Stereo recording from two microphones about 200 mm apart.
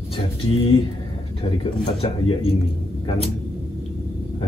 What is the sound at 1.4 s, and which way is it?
Speech, 25° left (ahead or behind).